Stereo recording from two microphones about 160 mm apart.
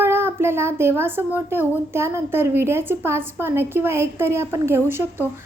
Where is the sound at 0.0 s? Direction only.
15° right (ahead or behind).